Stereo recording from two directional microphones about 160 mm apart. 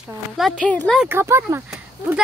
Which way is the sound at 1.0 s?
15° right (ahead or behind).